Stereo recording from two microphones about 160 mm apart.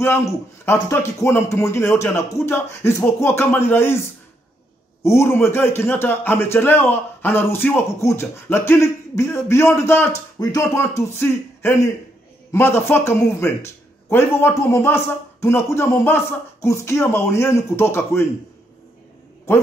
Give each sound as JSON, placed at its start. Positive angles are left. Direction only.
{"t": 0.0, "sound": "a man's voice", "side_deg": 15}
{"t": 5.0, "sound": "a man's voice", "side_deg": 15}